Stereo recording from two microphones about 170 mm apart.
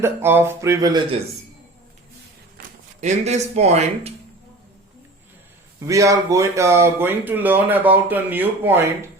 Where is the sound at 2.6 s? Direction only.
60° right (ahead or behind).